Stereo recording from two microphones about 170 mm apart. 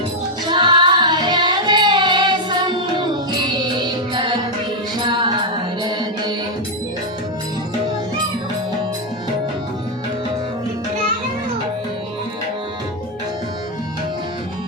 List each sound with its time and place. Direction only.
0.5 s music: 25° right (ahead or behind)